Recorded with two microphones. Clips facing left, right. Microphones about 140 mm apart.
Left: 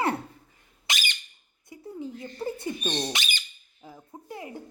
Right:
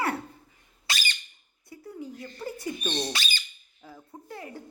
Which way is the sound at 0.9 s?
20° left (ahead or behind).